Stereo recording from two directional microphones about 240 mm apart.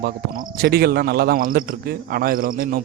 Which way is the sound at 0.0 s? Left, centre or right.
Right.